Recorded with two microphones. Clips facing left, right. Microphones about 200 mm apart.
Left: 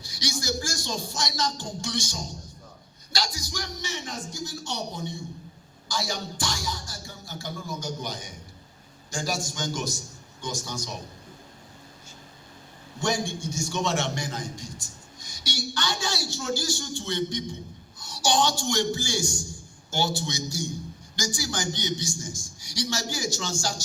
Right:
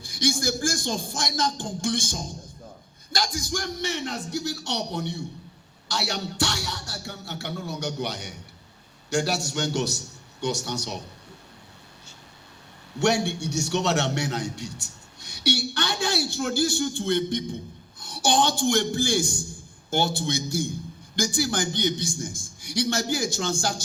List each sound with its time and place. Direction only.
0.0 s a man's voice: 55° right (ahead or behind); by 11.0 s 70° right (ahead or behind)
13.0 s a man's voice: 70° right (ahead or behind)